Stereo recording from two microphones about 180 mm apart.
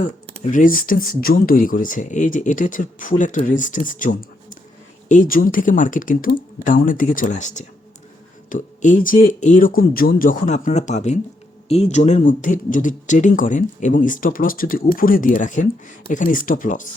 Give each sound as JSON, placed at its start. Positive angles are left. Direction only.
{"t": 0.5, "sound": "speech", "side_deg": 50}